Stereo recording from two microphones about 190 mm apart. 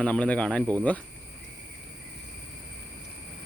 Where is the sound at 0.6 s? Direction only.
20° right (ahead or behind).